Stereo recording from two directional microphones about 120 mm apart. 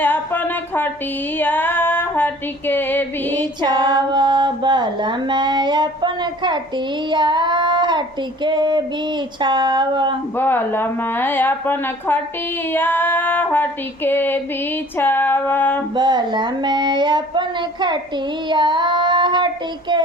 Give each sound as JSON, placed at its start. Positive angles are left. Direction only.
{"t": 0.0, "sound": "speech", "side_deg": 15}
{"t": 1.4, "sound": "female singing", "side_deg": 15}
{"t": 3.6, "sound": "a sound", "side_deg": -35}
{"t": 10.3, "sound": "a woman's voice", "side_deg": 15}
{"t": 16.0, "sound": "a sound", "side_deg": -40}
{"t": 18.4, "sound": "child singing", "side_deg": -40}